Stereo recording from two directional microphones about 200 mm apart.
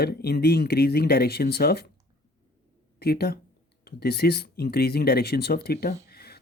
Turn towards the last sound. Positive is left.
turn(degrees=50)  # may be behind; listen again after turning